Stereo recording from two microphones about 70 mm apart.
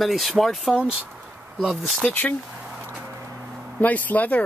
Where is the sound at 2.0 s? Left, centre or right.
Left.